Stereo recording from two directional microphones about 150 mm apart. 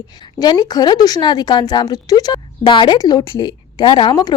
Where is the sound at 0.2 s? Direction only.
25° left (ahead or behind).